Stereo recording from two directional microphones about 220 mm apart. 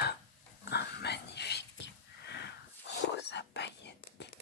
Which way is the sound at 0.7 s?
50° left (ahead or behind).